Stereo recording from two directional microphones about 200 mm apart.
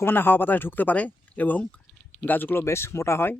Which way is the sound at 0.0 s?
10° left (ahead or behind).